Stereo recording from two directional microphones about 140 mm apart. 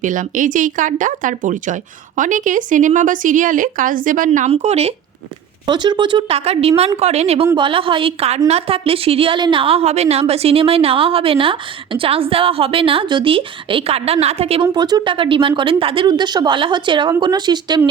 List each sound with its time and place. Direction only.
0.0 s speech: 70° right (ahead or behind)
4.3 s speech: 50° right (ahead or behind)
5.6 s speech: 30° right (ahead or behind); by 7.4 s 50° right (ahead or behind)
7.5 s a woman's voice: 35° right (ahead or behind)
14.7 s a woman's voice: 30° right (ahead or behind)